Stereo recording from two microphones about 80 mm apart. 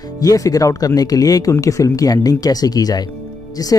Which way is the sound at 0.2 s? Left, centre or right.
Left.